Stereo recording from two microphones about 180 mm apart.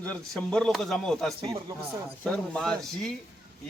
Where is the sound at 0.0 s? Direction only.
5° left (ahead or behind).